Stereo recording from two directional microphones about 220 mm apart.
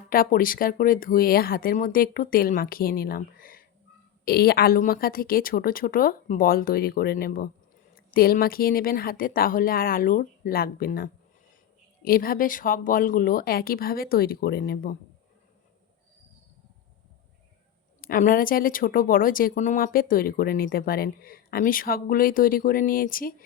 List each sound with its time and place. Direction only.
0.1 s speech: 40° left (ahead or behind)
18.0 s speech: 40° left (ahead or behind)